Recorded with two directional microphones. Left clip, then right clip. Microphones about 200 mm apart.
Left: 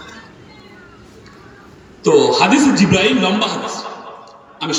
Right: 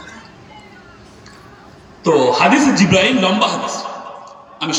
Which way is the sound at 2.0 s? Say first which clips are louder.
Left 1 dB; 20° left (ahead or behind).